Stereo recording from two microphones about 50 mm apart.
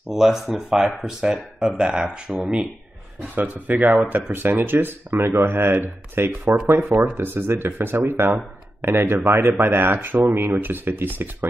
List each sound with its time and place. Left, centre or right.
0.1 s speech: centre
3.2 s speech: right